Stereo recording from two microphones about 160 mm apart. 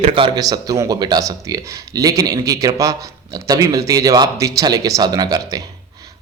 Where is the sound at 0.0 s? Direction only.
35° right (ahead or behind).